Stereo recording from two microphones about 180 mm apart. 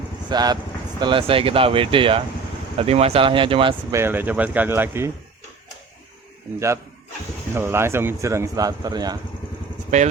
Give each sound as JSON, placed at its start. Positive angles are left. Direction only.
{"t": 0.3, "sound": "speech", "side_deg": -25}
{"t": 3.9, "sound": "speech", "side_deg": -10}
{"t": 7.5, "sound": "speech", "side_deg": -15}
{"t": 9.9, "sound": "speech", "side_deg": -40}